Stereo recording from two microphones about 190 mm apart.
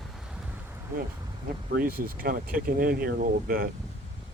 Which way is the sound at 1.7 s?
50° right (ahead or behind).